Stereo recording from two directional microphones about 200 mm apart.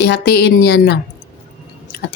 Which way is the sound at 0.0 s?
55° left (ahead or behind).